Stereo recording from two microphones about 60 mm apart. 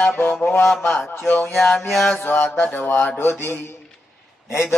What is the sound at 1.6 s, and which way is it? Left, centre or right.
Music, centre.